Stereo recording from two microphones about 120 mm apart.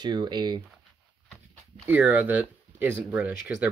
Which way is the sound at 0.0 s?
35° right (ahead or behind).